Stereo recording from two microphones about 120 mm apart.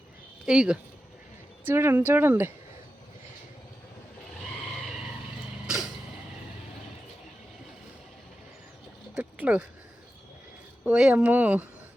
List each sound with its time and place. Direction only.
0.4 s speech: 5° right (ahead or behind)
1.6 s speech: 20° right (ahead or behind)
5.6 s music: 5° right (ahead or behind)
9.1 s a sound: 10° right (ahead or behind)
10.8 s speech: 10° right (ahead or behind)